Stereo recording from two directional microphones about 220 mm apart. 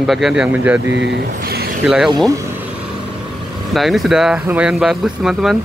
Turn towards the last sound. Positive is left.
turn(degrees=0)  # may be behind; listen again after turning